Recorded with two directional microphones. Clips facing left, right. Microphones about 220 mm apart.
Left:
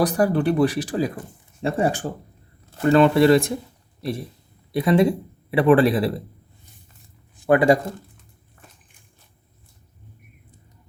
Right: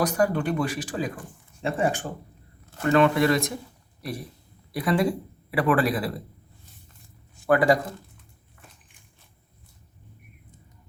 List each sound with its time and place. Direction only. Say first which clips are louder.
0.0 s speech: left 4 dB; 35° left (ahead or behind)
7.3 s speech: left 4 dB; 20° left (ahead or behind)